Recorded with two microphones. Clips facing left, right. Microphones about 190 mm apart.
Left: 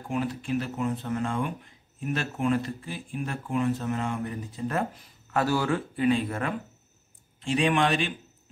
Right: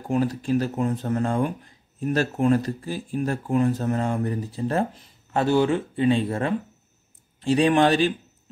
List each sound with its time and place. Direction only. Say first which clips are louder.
0.1 s speech: right 6 dB; 40° right (ahead or behind)